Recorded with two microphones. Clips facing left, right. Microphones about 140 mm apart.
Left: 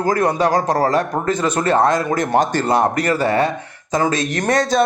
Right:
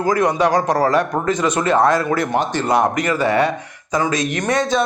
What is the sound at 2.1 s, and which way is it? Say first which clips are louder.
A man's voice: left 2 dB; 40° left (ahead or behind).